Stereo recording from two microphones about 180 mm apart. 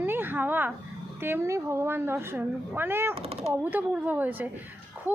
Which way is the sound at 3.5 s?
10° right (ahead or behind).